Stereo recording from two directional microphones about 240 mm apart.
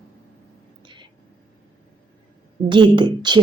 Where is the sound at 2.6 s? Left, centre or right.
Centre.